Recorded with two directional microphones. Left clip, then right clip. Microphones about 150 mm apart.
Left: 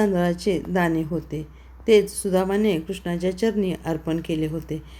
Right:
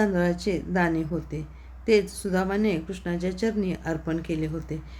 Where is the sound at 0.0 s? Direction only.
20° left (ahead or behind).